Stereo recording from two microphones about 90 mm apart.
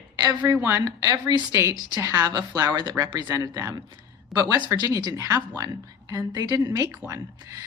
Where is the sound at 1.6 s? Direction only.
30° right (ahead or behind).